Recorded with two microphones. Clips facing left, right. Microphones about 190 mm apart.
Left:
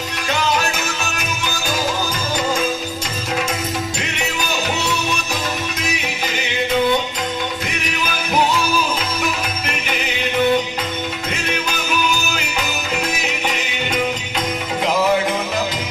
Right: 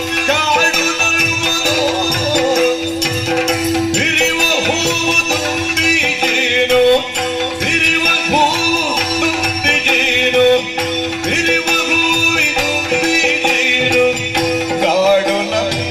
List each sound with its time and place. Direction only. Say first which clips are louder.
4.0 s music: right 7 dB; 75° right (ahead or behind)